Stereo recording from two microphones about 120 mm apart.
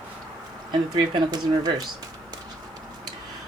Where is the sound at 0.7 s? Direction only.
40° right (ahead or behind).